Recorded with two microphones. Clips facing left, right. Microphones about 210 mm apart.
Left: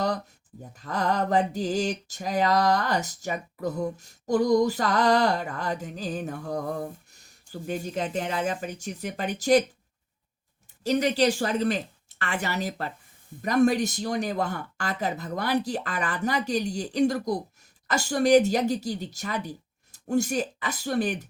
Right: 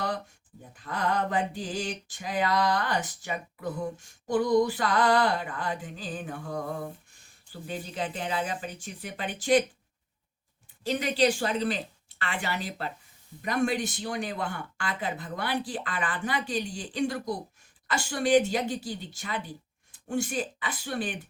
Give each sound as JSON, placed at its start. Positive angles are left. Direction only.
{"t": 0.8, "sound": "mantra", "side_deg": 40}
{"t": 7.1, "sound": "speech", "side_deg": 40}
{"t": 10.8, "sound": "speech", "side_deg": 40}
{"t": 13.4, "sound": "mantra", "side_deg": 40}
{"t": 19.9, "sound": "speech", "side_deg": 40}